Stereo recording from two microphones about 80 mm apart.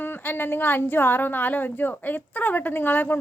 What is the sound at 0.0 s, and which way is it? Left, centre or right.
A woman's voice, left.